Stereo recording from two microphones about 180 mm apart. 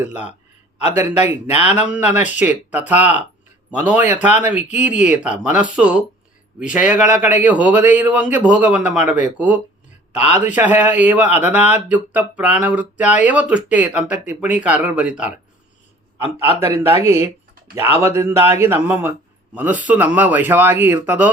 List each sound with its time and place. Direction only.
0.0 s speech: 10° right (ahead or behind)
0.9 s a man's voice: 35° left (ahead or behind)
1.5 s speech: 10° right (ahead or behind)
17.0 s speech: 15° right (ahead or behind)